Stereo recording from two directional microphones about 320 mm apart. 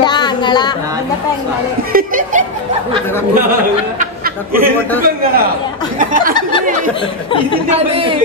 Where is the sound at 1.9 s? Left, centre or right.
Right.